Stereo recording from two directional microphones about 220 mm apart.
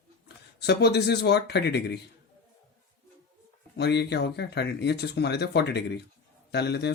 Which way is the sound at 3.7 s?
50° left (ahead or behind).